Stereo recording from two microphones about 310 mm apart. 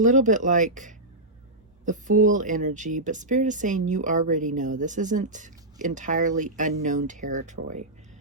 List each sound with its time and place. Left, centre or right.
0.0 s speech: right